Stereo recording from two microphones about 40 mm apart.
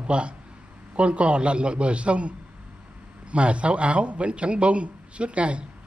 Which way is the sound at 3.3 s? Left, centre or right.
Right.